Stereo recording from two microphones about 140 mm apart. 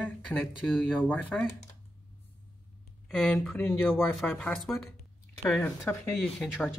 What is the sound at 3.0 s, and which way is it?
Speech, centre (ahead or behind).